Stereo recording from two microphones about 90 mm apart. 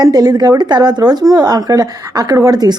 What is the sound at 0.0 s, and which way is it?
Speech, 45° right (ahead or behind).